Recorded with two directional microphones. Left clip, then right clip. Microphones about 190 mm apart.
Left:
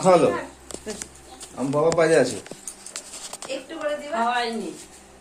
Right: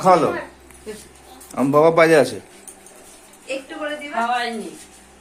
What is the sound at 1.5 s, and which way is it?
Speech, 70° right (ahead or behind).